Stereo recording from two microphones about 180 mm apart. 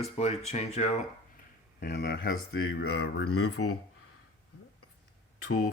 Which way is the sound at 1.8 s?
65° left (ahead or behind).